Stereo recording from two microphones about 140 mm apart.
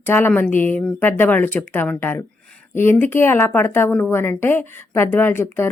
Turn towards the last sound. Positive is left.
turn(degrees=15)  # may be behind; listen again after turning